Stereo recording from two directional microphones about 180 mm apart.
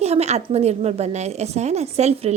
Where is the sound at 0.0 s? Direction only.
35° right (ahead or behind).